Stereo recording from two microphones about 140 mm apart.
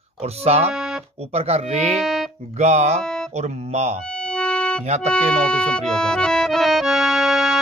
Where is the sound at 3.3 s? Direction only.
50° right (ahead or behind).